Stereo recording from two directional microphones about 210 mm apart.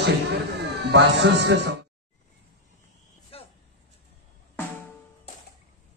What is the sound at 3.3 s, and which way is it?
Vehicle, 25° left (ahead or behind).